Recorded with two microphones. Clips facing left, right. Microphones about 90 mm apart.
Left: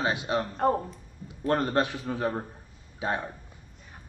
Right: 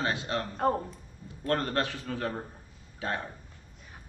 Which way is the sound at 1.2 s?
15° left (ahead or behind).